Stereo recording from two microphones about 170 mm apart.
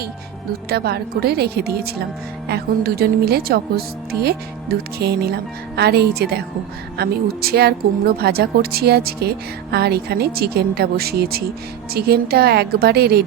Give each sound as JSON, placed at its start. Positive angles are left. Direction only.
{"t": 0.7, "sound": "speech", "side_deg": -65}